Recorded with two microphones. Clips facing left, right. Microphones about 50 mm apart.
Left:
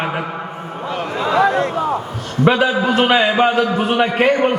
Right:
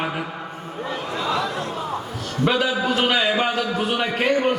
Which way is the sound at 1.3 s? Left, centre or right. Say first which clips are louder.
Left 10 dB; left.